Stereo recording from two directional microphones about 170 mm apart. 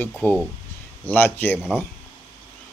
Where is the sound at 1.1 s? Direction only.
10° left (ahead or behind).